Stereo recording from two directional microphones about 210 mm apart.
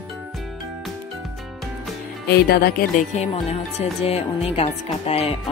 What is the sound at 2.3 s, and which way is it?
Speech, 50° left (ahead or behind).